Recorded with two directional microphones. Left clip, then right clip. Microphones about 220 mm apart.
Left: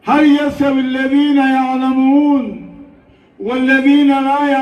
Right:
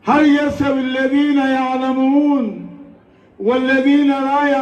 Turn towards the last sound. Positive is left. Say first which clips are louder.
# left 2 dB
turn(degrees=45)  # may be behind; listen again after turning